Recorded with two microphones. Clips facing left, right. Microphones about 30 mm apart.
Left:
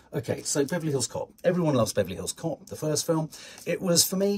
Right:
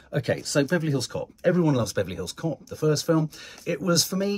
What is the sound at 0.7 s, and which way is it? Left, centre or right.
Speech, right.